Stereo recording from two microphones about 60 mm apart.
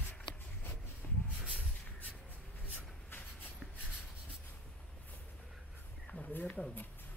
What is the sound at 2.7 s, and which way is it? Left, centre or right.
Vehicle, left.